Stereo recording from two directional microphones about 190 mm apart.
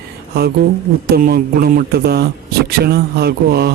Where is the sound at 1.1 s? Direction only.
55° right (ahead or behind).